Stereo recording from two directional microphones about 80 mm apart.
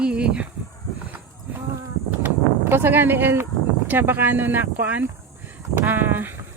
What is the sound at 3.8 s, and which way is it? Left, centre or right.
Speech, right.